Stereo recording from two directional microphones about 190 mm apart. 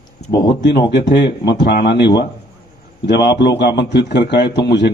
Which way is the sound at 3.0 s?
60° left (ahead or behind).